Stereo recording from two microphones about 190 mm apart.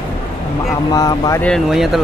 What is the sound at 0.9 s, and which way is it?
Speech, 20° left (ahead or behind).